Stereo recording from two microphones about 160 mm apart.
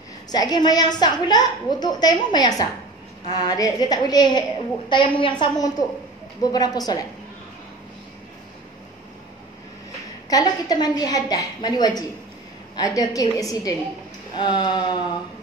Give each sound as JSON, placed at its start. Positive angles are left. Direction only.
{"t": 0.3, "sound": "a woman's voice", "side_deg": 25}
{"t": 10.3, "sound": "a woman's voice", "side_deg": 25}